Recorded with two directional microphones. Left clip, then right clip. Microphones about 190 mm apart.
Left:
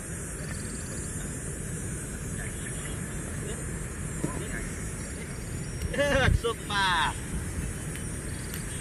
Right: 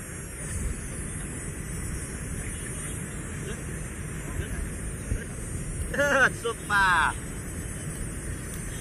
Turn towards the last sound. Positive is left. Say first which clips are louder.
# right 4 dB
turn(degrees=0)  # may be behind; listen again after turning